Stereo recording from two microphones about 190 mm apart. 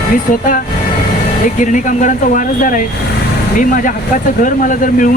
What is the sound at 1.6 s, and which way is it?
Speech, 40° left (ahead or behind).